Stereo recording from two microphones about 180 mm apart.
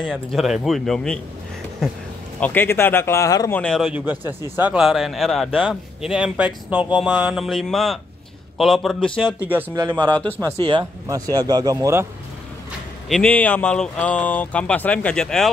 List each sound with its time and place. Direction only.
0.0 s speech: 5° left (ahead or behind)
9.4 s speech: 10° right (ahead or behind)
9.8 s speech: 20° right (ahead or behind)
10.1 s speech: 10° left (ahead or behind)
10.6 s speech: 25° right (ahead or behind)
13.1 s speech: 10° left (ahead or behind)